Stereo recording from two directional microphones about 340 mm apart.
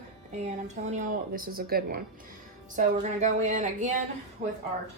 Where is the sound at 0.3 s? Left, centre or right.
Centre.